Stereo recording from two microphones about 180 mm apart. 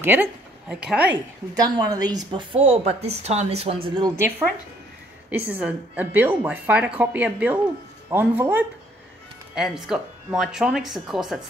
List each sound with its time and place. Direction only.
0.0 s speech: 10° right (ahead or behind)
1.5 s a woman's voice: 20° right (ahead or behind)
5.3 s a woman's voice: 10° right (ahead or behind)